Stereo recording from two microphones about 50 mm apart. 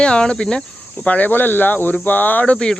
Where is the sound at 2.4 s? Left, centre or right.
Left.